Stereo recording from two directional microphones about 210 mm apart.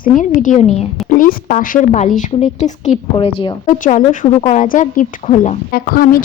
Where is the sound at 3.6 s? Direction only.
35° left (ahead or behind).